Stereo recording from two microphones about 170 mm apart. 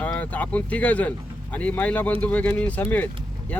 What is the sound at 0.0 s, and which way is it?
Speech, 10° left (ahead or behind).